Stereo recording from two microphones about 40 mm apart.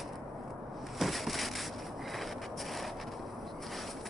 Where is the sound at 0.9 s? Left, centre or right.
Centre.